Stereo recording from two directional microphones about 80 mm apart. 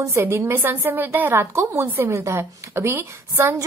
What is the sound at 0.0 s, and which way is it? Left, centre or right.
A woman's voice, right.